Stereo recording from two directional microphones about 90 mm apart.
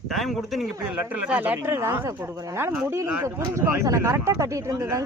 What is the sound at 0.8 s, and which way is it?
Speech, 15° right (ahead or behind).